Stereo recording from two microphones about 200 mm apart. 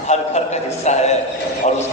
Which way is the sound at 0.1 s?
35° left (ahead or behind).